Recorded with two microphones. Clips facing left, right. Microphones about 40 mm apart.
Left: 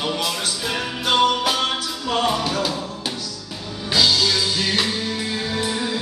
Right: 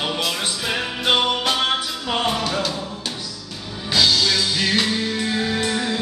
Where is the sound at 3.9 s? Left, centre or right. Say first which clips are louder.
Even; centre.